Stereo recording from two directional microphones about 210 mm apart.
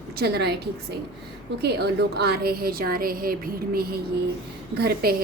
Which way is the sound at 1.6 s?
50° right (ahead or behind).